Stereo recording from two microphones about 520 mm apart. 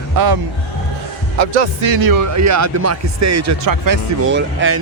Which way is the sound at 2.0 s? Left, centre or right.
Right.